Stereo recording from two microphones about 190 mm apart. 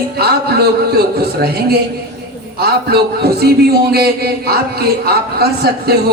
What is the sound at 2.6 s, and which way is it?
A man's voice, 55° right (ahead or behind).